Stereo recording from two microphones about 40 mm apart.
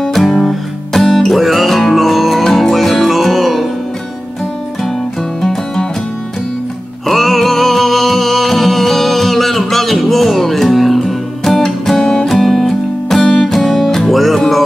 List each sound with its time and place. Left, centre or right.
0.0 s guitar: centre
5.4 s music: centre
7.1 s music: centre
12.0 s music: centre
12.3 s music: centre